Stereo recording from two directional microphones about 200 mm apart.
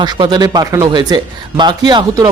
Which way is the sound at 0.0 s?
20° right (ahead or behind).